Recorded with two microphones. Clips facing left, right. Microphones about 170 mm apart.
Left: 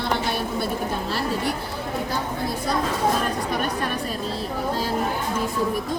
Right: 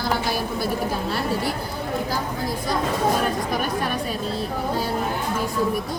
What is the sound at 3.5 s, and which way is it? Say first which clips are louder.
Speech: right 1 dB; centre (ahead or behind).